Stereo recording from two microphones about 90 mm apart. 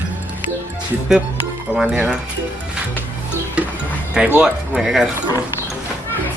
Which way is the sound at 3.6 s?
15° right (ahead or behind).